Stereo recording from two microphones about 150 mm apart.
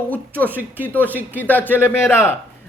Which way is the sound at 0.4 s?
10° right (ahead or behind).